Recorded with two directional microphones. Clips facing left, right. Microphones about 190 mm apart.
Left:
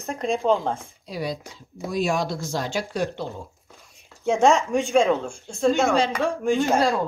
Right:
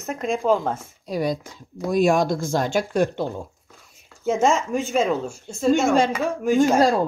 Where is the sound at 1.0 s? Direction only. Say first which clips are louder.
Right 6 dB; 45° right (ahead or behind).